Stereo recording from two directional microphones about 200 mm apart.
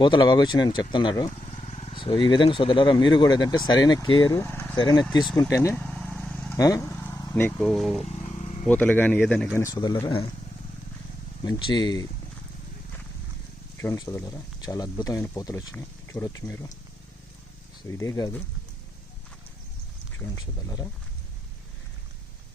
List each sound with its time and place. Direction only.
0.0 s speech: 20° left (ahead or behind)
1.6 s speech: 30° left (ahead or behind); by 5.8 s 15° left (ahead or behind)
5.8 s vehicle: 5° left (ahead or behind)
6.6 s speech: 15° left (ahead or behind); by 8.0 s centre (ahead or behind)
8.0 s vehicle: 35° left (ahead or behind)
8.6 s speech: 10° left (ahead or behind)
9.6 s speech: 20° left (ahead or behind)
11.4 s speech: 20° left (ahead or behind)
13.8 s speech: 15° left (ahead or behind)
17.8 s speech: 15° left (ahead or behind)
20.1 s speech: 15° left (ahead or behind)